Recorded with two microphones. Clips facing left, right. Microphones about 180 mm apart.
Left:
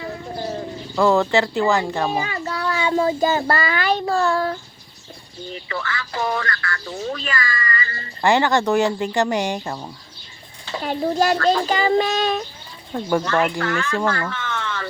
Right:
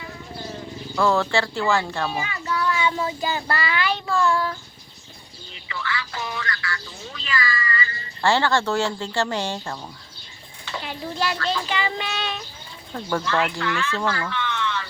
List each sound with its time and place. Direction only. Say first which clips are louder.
0.9 s speech: left 4 dB; 15° left (ahead or behind)
2.0 s speech: left 4 dB; 40° left (ahead or behind)
5.6 s speech: even; 45° left (ahead or behind)
8.2 s speech: left 3 dB; 15° left (ahead or behind)
10.8 s speech: left 9 dB; 45° left (ahead or behind)
12.9 s speech: left 5 dB; 15° left (ahead or behind)
13.2 s speech: left 3 dB; 45° left (ahead or behind)